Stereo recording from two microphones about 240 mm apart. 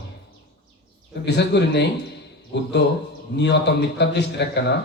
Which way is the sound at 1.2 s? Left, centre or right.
Left.